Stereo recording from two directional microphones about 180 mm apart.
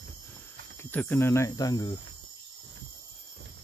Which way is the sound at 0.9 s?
10° left (ahead or behind).